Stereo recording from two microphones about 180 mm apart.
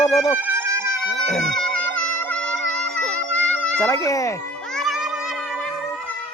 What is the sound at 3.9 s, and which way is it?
Music, 20° left (ahead or behind).